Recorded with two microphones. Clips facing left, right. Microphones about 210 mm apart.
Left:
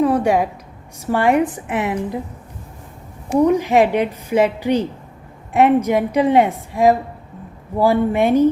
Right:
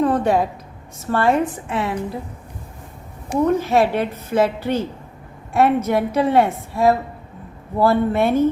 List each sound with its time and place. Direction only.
0.0 s a sound: 10° left (ahead or behind)
0.9 s a woman's voice: 15° left (ahead or behind)
3.4 s a woman's voice: 15° left (ahead or behind)